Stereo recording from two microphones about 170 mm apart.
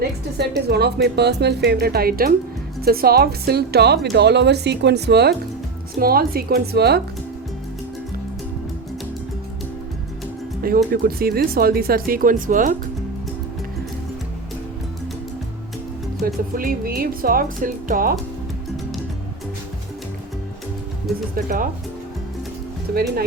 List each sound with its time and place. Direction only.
0.3 s a woman's voice: 75° right (ahead or behind)
6.0 s speech: 60° right (ahead or behind)
10.9 s speech: 65° right (ahead or behind)
16.2 s speech: 60° right (ahead or behind)
21.3 s speech: 55° right (ahead or behind)